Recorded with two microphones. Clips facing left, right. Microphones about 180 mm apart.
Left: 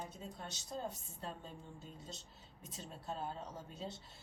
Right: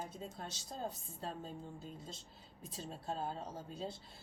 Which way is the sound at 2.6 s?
35° right (ahead or behind).